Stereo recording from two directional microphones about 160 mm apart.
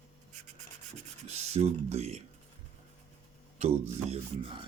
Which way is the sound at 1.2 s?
40° right (ahead or behind).